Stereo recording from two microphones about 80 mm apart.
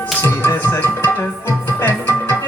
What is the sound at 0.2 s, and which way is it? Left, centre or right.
Music, left.